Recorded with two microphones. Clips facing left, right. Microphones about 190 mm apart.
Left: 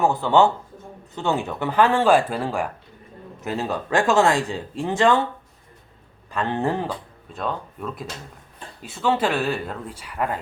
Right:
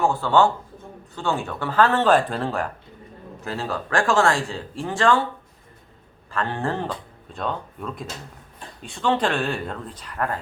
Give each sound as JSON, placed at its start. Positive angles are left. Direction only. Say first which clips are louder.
{"t": 0.0, "sound": "speech", "louder": "left 1 dB", "side_deg": 20}
{"t": 6.3, "sound": "speech", "louder": "left 2 dB", "side_deg": 20}
{"t": 7.3, "sound": "speech", "louder": "even", "side_deg": 0}